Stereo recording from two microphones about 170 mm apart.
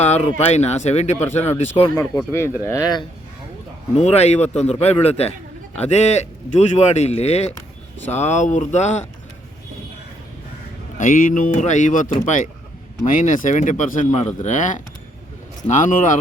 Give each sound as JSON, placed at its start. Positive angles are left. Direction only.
{"t": 0.3, "sound": "speech", "side_deg": 40}
{"t": 2.0, "sound": "speech", "side_deg": 15}
{"t": 3.9, "sound": "speech", "side_deg": 40}
{"t": 10.9, "sound": "speech", "side_deg": 50}